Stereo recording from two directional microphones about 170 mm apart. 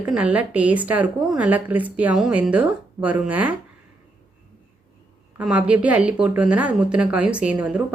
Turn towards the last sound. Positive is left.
turn(degrees=-5)  # may be behind; listen again after turning